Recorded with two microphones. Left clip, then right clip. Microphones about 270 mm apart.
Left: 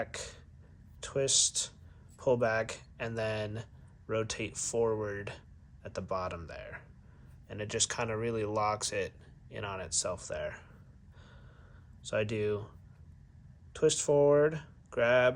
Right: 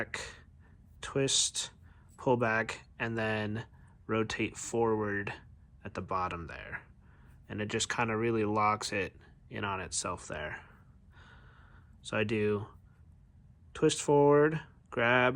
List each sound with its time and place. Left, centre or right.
0.0 s a sound: right
1.0 s speech: right
12.0 s speech: right
13.7 s speech: right